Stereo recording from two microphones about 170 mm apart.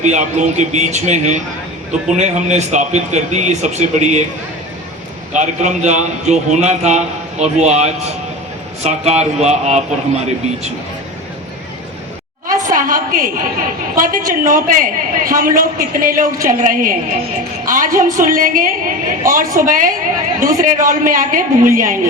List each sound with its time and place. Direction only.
0.0 s a man's voice: 45° right (ahead or behind)
5.3 s a man's voice: 45° right (ahead or behind)
12.5 s a sound: 50° right (ahead or behind)
13.9 s a man's voice: 55° right (ahead or behind)